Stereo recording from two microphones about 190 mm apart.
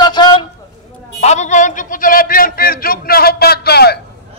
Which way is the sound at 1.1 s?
35° left (ahead or behind).